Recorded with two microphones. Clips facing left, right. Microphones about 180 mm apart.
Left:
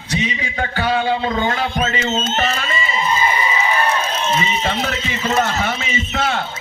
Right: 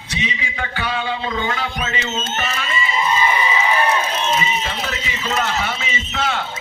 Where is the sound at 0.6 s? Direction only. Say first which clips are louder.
Left 6 dB; 40° left (ahead or behind).